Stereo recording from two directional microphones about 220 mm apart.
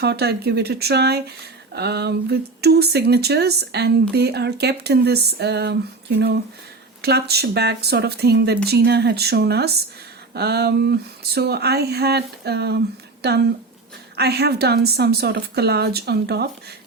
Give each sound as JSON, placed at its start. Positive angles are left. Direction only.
{"t": 0.0, "sound": "speech", "side_deg": -45}
{"t": 7.0, "sound": "speech", "side_deg": -45}
{"t": 14.2, "sound": "speech", "side_deg": -45}